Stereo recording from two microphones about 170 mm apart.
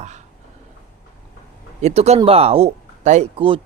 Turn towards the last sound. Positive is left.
turn(degrees=-30)  # may be behind; listen again after turning